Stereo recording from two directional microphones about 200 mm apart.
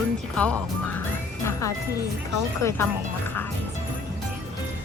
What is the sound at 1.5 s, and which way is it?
Speech, 15° left (ahead or behind).